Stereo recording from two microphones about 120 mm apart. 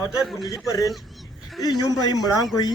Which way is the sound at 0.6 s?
30° left (ahead or behind).